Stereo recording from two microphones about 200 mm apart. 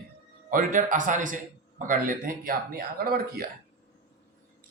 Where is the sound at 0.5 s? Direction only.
40° right (ahead or behind).